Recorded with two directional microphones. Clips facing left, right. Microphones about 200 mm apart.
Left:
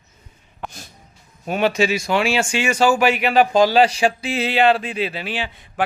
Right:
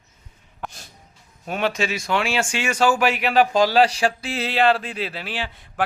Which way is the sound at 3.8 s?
20° left (ahead or behind).